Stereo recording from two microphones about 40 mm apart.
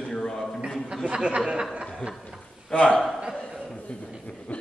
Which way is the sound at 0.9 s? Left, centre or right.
Right.